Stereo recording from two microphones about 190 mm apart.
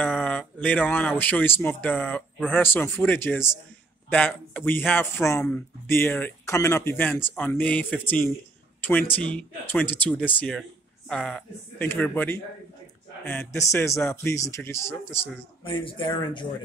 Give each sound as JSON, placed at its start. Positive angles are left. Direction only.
{"t": 0.0, "sound": "speech", "side_deg": 5}
{"t": 15.6, "sound": "speech", "side_deg": 25}